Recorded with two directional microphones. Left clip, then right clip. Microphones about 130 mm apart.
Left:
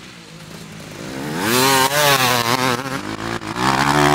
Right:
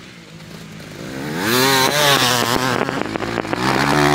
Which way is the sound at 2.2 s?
60° left (ahead or behind).